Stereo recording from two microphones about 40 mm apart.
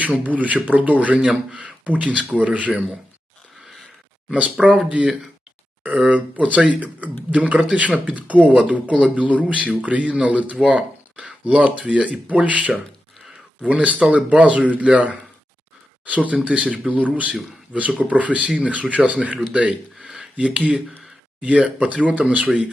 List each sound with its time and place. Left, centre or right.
0.0 s speech: right
1.2 s speech: right
1.6 s speech: right
4.3 s speech: right